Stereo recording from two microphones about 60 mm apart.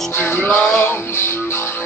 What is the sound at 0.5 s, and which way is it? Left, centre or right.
Music, left.